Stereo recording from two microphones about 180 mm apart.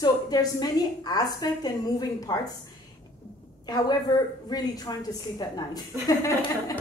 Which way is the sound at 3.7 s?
25° left (ahead or behind).